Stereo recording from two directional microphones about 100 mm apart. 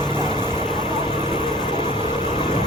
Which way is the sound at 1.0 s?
75° right (ahead or behind).